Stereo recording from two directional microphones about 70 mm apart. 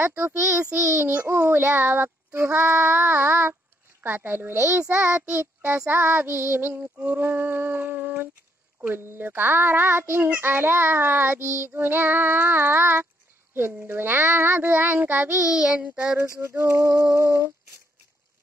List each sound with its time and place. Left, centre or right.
0.0 s a child's voice: right
2.5 s child singing: right
4.7 s child singing: centre
5.0 s a child's voice: right
5.9 s child singing: right
15.4 s child singing: centre
16.3 s a child's voice: right